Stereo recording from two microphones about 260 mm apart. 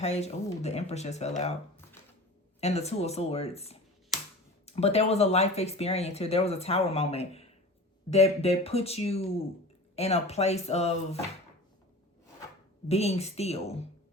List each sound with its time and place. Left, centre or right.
0.0 s speech: left
2.6 s speech: left
12.9 s speech: left